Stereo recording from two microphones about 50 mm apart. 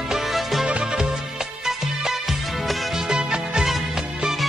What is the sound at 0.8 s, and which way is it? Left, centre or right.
Music, centre.